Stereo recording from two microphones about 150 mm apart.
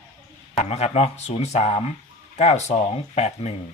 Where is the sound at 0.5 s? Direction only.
45° left (ahead or behind).